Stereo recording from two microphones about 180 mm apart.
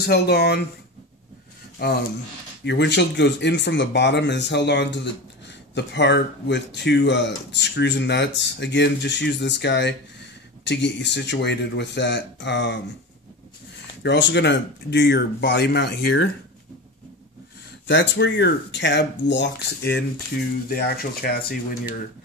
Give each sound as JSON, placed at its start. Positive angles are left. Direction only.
{"t": 0.0, "sound": "speech", "side_deg": 60}
{"t": 1.8, "sound": "speech", "side_deg": 60}
{"t": 2.6, "sound": "speech", "side_deg": 75}
{"t": 14.0, "sound": "speech", "side_deg": 80}
{"t": 17.8, "sound": "speech", "side_deg": 85}
{"t": 20.6, "sound": "speech", "side_deg": 55}